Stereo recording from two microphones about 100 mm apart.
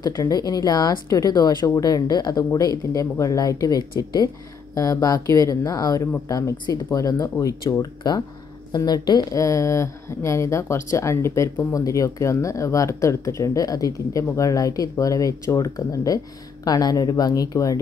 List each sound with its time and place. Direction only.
0.0 s speech: 35° left (ahead or behind)